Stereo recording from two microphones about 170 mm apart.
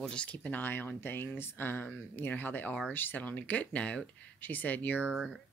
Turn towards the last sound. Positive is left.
turn(degrees=5)  # may be behind; listen again after turning